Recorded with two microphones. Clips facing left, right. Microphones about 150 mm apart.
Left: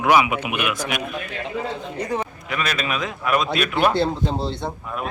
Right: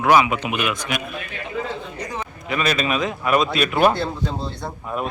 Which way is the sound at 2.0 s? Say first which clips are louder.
Left 8 dB; 55° left (ahead or behind).